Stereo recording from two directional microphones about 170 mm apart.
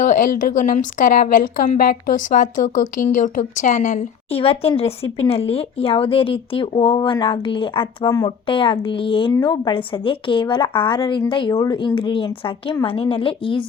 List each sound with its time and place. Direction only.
0.0 s a woman's voice: 50° left (ahead or behind)
4.3 s speech: 35° left (ahead or behind)